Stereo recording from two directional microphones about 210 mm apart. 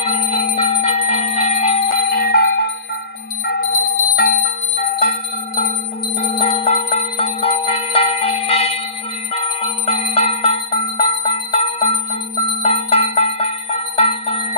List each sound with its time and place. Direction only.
0.0 s bell: 30° left (ahead or behind)
6.1 s bell: 25° left (ahead or behind)
9.3 s bicycle bell: 30° left (ahead or behind)
12.4 s bell: 30° left (ahead or behind)